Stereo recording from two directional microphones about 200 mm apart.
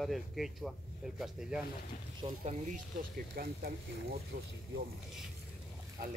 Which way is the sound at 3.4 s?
50° right (ahead or behind).